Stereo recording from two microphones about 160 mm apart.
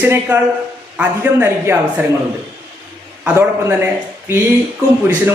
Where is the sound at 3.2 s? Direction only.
15° right (ahead or behind).